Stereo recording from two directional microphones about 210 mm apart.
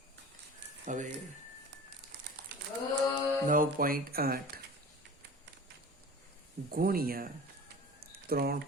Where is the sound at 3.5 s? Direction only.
40° right (ahead or behind).